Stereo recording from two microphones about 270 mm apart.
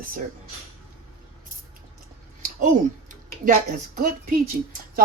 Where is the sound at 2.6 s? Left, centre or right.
Right.